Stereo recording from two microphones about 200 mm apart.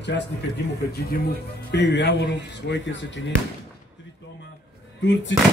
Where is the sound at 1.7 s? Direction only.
60° left (ahead or behind).